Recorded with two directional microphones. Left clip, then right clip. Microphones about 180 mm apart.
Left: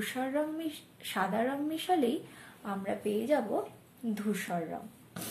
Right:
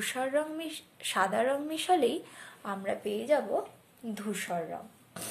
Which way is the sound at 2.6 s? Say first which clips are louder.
Right 1 dB; 35° right (ahead or behind).